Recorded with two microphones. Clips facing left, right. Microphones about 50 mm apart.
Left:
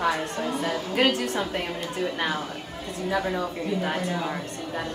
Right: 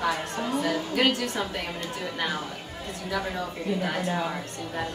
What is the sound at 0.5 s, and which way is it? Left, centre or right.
A woman's voice, left.